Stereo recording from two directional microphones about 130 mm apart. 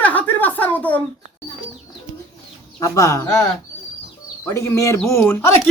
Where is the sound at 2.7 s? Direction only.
25° left (ahead or behind).